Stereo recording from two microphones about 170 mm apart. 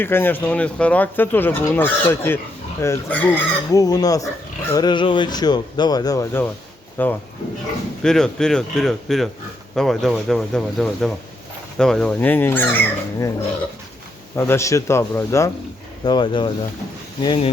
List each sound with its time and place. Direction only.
0.0 s speech: 15° left (ahead or behind)
3.8 s speech: 20° left (ahead or behind)
14.3 s speech: 15° left (ahead or behind)
16.0 s speech: 25° left (ahead or behind)